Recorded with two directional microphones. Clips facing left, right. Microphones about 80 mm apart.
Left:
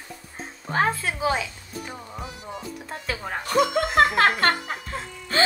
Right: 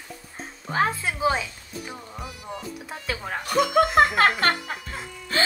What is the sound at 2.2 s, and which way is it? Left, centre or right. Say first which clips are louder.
Music: even; centre.